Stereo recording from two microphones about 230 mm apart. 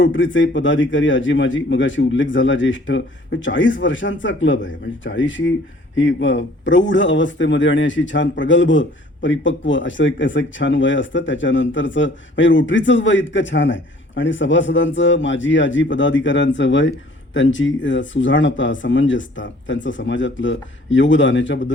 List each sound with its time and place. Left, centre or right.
0.0 s speech: left